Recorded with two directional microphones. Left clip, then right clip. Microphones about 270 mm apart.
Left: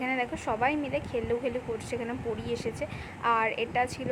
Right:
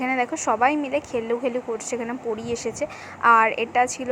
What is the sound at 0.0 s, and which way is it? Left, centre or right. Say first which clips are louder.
A woman's voice: right 7 dB; centre.